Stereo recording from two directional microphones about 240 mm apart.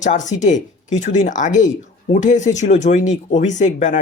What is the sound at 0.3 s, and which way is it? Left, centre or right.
Speech, left.